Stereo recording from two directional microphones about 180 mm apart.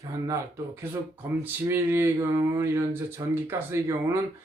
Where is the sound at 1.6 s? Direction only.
15° right (ahead or behind).